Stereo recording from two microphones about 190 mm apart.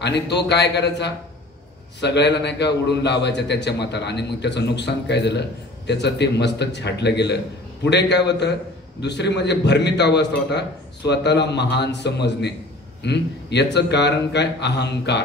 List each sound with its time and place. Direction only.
0.0 s a man's voice: 65° left (ahead or behind)